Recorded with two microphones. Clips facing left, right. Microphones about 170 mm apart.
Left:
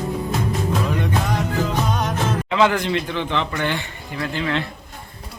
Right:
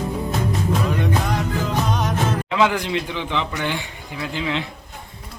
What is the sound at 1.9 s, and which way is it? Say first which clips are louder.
A man's voice: even; centre (ahead or behind).